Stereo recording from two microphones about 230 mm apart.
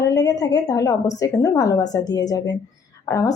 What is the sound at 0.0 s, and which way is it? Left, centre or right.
A woman's voice, centre.